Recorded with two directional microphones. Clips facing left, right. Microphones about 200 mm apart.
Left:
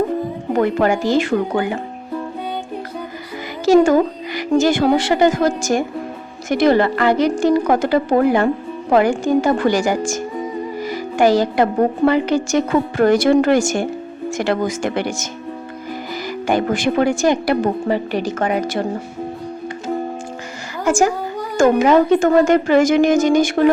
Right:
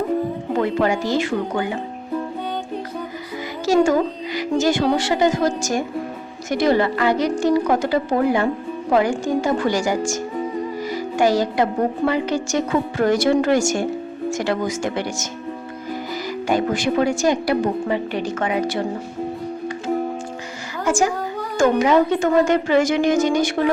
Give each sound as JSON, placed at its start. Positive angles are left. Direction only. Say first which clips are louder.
{"t": 0.5, "sound": "a woman's voice", "louder": "left 4 dB", "side_deg": 50}
{"t": 4.5, "sound": "a woman's voice", "louder": "left 4 dB", "side_deg": 55}
{"t": 16.5, "sound": "a woman's voice", "louder": "left 2 dB", "side_deg": 55}
{"t": 17.8, "sound": "speech", "louder": "left 3 dB", "side_deg": 40}
{"t": 20.8, "sound": "a woman's voice", "louder": "left 3 dB", "side_deg": 45}